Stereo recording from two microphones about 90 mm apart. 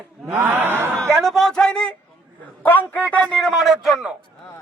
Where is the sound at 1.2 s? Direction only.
5° left (ahead or behind); by 3.0 s 20° left (ahead or behind).